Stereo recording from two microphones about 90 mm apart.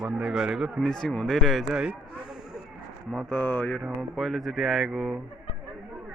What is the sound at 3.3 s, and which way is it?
Mantra, 15° left (ahead or behind).